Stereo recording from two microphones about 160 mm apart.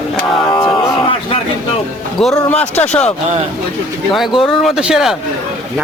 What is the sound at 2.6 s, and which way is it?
Speech, 40° left (ahead or behind).